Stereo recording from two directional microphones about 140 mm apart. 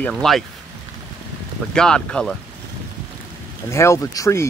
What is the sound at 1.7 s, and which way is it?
Speech, 5° left (ahead or behind).